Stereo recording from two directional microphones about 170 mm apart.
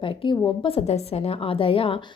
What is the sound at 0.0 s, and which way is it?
Speech, 30° left (ahead or behind).